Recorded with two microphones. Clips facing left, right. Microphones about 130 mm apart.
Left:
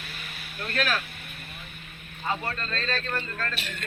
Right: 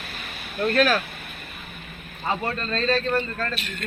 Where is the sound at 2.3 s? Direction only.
20° right (ahead or behind).